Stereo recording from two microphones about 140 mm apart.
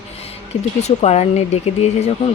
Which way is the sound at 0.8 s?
50° left (ahead or behind).